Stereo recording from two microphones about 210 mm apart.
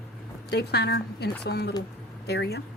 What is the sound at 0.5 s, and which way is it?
Speech, 50° left (ahead or behind).